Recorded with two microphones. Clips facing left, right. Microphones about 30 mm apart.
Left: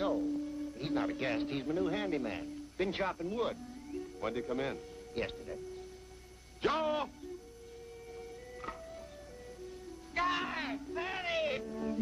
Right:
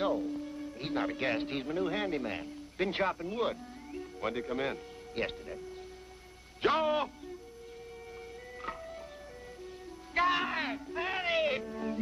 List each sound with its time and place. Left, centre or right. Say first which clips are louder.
0.0 s speech: right 1 dB; centre
6.6 s speech: right 4 dB; centre
8.5 s music: right 4 dB; right
10.1 s speech: right 4 dB; centre